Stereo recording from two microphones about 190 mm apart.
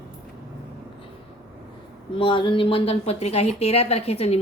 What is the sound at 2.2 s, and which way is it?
Speech, 25° left (ahead or behind).